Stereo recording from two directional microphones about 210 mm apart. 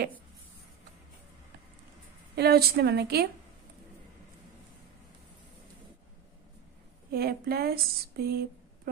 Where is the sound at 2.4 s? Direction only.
50° right (ahead or behind).